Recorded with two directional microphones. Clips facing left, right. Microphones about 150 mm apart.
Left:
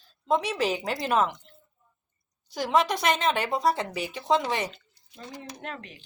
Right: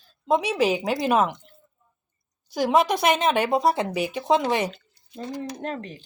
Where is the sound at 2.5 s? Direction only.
10° right (ahead or behind).